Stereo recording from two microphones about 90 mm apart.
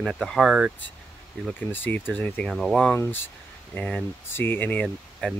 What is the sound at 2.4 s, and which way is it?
Speech, centre (ahead or behind).